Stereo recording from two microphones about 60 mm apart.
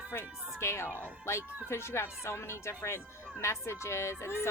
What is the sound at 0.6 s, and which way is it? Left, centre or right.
Speech, left.